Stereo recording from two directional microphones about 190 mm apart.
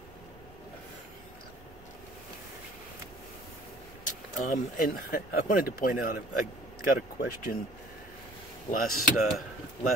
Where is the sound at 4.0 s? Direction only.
45° left (ahead or behind).